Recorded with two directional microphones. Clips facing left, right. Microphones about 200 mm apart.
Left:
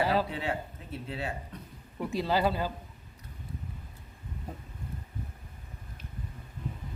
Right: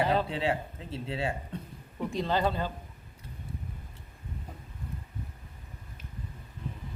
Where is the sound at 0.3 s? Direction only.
25° right (ahead or behind).